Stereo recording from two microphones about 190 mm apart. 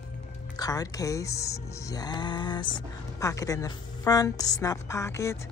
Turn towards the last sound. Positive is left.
turn(degrees=15)  # may be behind; listen again after turning